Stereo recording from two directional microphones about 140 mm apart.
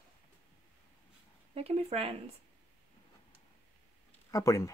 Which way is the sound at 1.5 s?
45° right (ahead or behind).